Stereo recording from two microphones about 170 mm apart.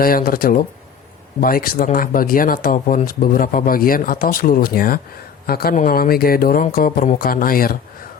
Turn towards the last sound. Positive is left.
turn(degrees=55)  # may be behind; listen again after turning